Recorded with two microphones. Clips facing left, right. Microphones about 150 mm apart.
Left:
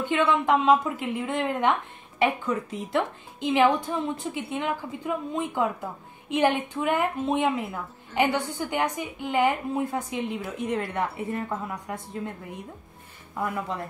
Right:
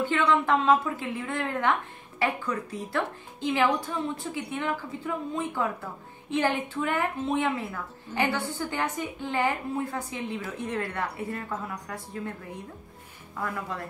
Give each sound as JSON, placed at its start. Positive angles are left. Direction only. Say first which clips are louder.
{"t": 0.0, "sound": "a woman's voice", "louder": "left 1 dB", "side_deg": 20}